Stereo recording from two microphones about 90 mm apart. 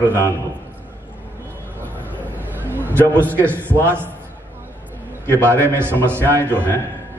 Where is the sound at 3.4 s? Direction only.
25° right (ahead or behind).